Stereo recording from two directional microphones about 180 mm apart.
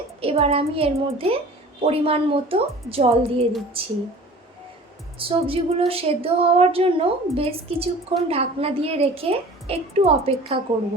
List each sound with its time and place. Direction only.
0.2 s a woman's voice: 35° right (ahead or behind)
5.1 s a woman's voice: 30° right (ahead or behind)